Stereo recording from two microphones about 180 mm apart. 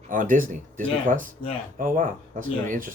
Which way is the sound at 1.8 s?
50° right (ahead or behind).